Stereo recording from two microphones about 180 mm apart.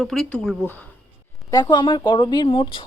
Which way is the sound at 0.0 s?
Centre (ahead or behind).